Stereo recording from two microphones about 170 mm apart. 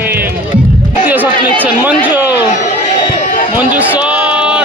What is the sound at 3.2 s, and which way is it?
Run, 50° left (ahead or behind).